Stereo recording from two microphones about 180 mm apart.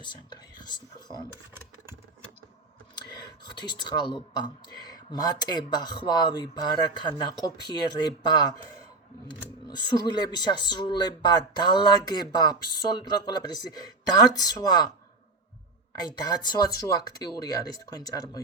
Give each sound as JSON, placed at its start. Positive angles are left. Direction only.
{"t": 0.0, "sound": "speech", "side_deg": 25}
{"t": 2.9, "sound": "speech", "side_deg": 25}
{"t": 16.0, "sound": "speech", "side_deg": 25}